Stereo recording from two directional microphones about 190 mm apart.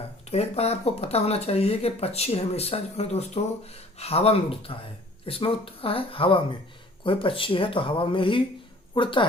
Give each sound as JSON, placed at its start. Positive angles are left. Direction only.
{"t": 0.3, "sound": "speech", "side_deg": 35}